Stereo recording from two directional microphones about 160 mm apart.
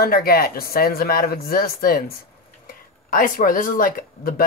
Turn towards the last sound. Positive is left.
turn(degrees=65)  # may be behind; listen again after turning